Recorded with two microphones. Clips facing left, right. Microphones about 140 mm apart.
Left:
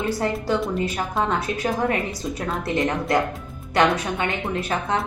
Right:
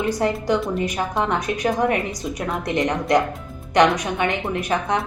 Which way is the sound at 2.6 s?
20° right (ahead or behind).